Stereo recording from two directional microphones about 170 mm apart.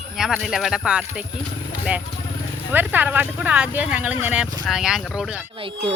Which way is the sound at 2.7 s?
10° right (ahead or behind).